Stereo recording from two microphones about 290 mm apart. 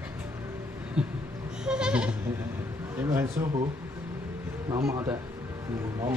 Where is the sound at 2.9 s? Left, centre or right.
Centre.